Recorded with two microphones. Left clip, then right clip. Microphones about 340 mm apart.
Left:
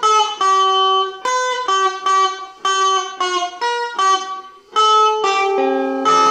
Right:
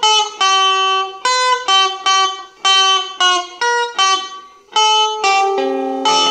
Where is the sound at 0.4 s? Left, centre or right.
Right.